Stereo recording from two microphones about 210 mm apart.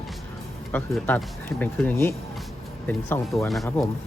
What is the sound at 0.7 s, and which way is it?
Speech, 10° left (ahead or behind).